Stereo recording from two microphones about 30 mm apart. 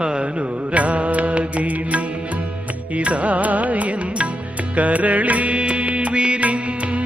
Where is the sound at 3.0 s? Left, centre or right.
Right.